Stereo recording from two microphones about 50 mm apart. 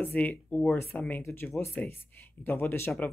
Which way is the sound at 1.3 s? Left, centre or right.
Left.